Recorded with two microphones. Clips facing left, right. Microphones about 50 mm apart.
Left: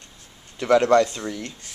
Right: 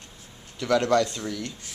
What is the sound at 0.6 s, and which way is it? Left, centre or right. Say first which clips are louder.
Speech: left 5 dB; left.